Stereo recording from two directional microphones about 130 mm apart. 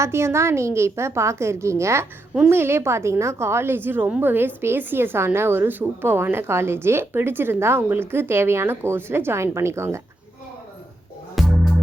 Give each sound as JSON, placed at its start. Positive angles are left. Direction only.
{"t": 0.0, "sound": "a woman's voice", "side_deg": -20}
{"t": 11.3, "sound": "music", "side_deg": 0}